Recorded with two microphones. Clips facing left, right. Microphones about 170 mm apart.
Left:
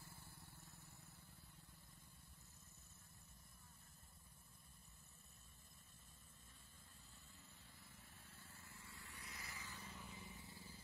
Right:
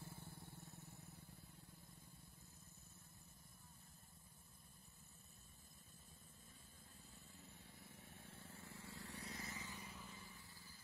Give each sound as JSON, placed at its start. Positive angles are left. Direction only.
{"t": 0.1, "sound": "vehicle", "side_deg": -50}
{"t": 8.8, "sound": "vehicle", "side_deg": -75}
{"t": 9.2, "sound": "vehicle", "side_deg": -25}
{"t": 10.0, "sound": "vehicle", "side_deg": 15}